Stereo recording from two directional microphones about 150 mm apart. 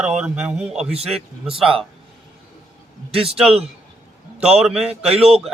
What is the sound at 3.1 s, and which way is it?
Speech, 40° right (ahead or behind).